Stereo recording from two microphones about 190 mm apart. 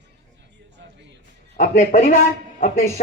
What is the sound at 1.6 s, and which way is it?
Speech, 40° left (ahead or behind).